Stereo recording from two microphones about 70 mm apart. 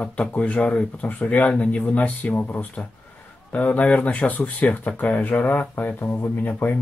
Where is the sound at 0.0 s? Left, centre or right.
Centre.